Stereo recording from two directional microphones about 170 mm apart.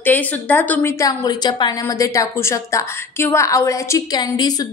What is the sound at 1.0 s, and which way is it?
A woman's voice, 25° left (ahead or behind).